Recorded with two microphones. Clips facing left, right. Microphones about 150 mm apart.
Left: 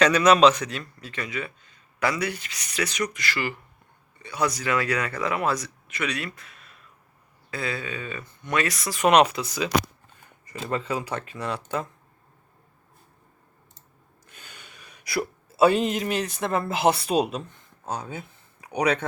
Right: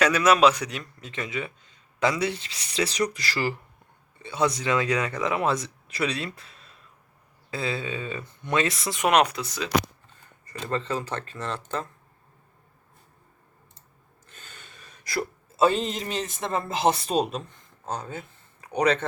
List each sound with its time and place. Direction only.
0.0 s a man's voice: 5° right (ahead or behind); by 3.5 s 35° right (ahead or behind)
4.2 s a man's voice: 25° right (ahead or behind)
9.0 s speech: centre (ahead or behind)
14.3 s a sound: 10° left (ahead or behind)
17.1 s speech: 5° left (ahead or behind)